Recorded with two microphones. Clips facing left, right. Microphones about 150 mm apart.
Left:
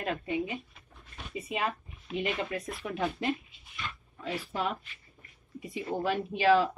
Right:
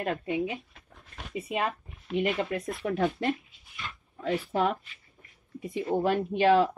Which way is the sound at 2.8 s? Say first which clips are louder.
Right 9 dB; 45° right (ahead or behind).